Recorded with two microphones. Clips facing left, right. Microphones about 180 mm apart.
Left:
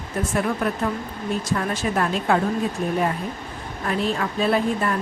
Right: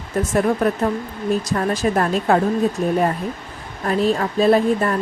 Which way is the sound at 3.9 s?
40° right (ahead or behind).